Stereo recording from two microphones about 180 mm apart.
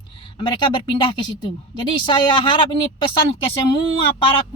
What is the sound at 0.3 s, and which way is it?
Speech, 30° left (ahead or behind).